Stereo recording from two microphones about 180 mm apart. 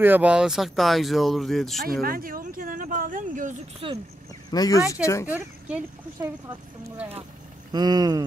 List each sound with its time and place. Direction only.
0.0 s speech: 10° right (ahead or behind)
2.0 s a sound: 50° right (ahead or behind)
3.8 s speech: 30° right (ahead or behind)
4.5 s speech: 20° left (ahead or behind)
7.7 s speech: 20° right (ahead or behind)